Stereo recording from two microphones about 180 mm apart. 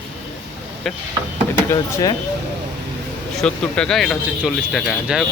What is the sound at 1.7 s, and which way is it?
Speech, 20° left (ahead or behind).